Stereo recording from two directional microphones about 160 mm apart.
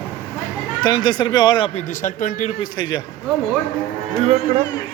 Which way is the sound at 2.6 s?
25° left (ahead or behind).